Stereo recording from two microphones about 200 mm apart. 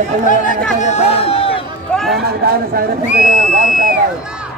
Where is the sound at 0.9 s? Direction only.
30° left (ahead or behind).